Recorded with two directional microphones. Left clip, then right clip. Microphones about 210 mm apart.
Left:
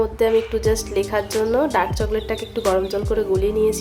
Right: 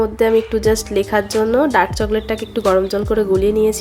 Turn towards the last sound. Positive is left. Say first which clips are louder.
# right 4 dB
turn(degrees=-20)  # may be behind; listen again after turning